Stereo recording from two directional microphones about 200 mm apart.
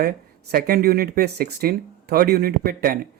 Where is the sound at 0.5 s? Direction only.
50° right (ahead or behind).